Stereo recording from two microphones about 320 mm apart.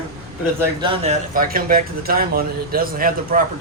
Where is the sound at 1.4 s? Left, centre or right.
Right.